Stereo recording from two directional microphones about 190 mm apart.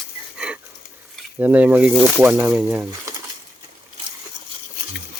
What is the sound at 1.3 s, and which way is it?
Speech, 10° right (ahead or behind).